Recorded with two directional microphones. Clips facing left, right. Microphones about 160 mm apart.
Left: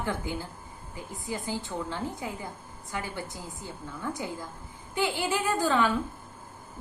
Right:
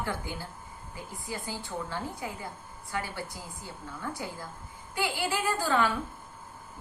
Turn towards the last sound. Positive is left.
turn(degrees=20)  # may be behind; listen again after turning